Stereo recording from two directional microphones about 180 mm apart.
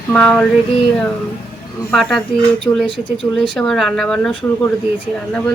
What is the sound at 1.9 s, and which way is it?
Speech, centre (ahead or behind).